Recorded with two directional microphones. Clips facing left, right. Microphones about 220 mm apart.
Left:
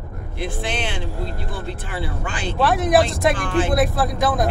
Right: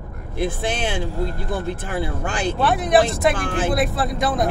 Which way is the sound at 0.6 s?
45° right (ahead or behind).